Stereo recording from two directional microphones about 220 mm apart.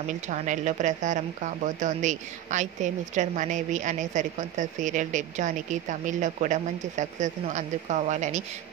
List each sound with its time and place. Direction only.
0.3 s speech: 35° right (ahead or behind)